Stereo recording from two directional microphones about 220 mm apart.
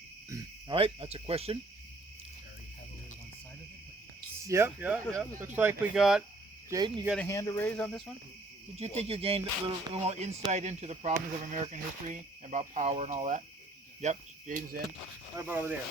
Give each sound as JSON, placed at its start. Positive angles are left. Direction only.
{"t": 0.3, "sound": "cricket", "side_deg": -15}
{"t": 0.8, "sound": "speech", "side_deg": -25}
{"t": 4.4, "sound": "speech", "side_deg": -10}
{"t": 6.7, "sound": "speech", "side_deg": -20}
{"t": 7.2, "sound": "speech", "side_deg": 15}
{"t": 8.8, "sound": "speech", "side_deg": -30}
{"t": 15.4, "sound": "speech", "side_deg": -10}